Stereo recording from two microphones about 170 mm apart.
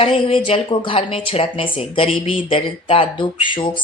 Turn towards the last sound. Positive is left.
turn(degrees=30)  # may be behind; listen again after turning